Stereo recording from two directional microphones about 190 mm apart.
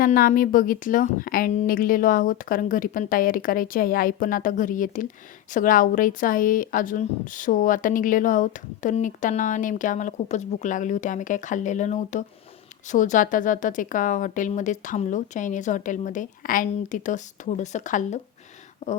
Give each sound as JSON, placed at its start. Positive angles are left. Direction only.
{"t": 0.0, "sound": "a woman's voice", "side_deg": 45}